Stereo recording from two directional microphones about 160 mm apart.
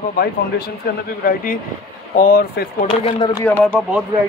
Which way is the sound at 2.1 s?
70° left (ahead or behind).